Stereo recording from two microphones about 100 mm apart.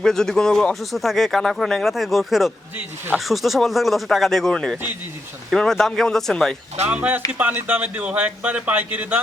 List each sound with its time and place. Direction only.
0.0 s speech: 5° left (ahead or behind)
6.8 s speech: 15° right (ahead or behind)